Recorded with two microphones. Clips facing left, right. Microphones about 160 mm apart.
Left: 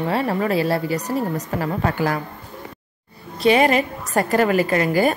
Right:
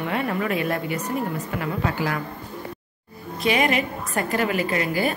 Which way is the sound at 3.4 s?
35° left (ahead or behind).